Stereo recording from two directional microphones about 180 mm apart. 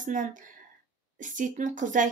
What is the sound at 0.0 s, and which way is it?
Speech, 45° right (ahead or behind).